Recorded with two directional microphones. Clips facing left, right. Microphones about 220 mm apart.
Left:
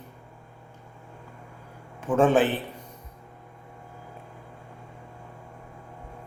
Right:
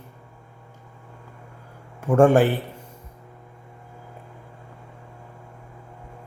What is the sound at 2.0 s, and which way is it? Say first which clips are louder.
Speech: right 4 dB; 10° right (ahead or behind).